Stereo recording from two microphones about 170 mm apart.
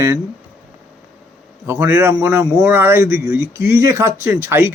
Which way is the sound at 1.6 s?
15° right (ahead or behind).